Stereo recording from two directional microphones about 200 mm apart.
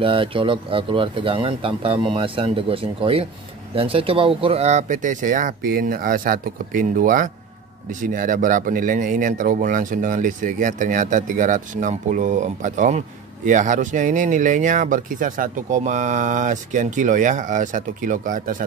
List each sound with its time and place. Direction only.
0.0 s speech: 25° right (ahead or behind); by 18.6 s 40° right (ahead or behind)